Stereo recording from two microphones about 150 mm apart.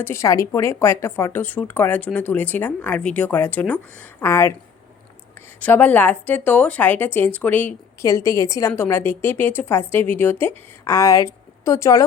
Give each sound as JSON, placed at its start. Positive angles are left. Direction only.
{"t": 0.0, "sound": "speech", "side_deg": 20}
{"t": 5.5, "sound": "speech", "side_deg": 10}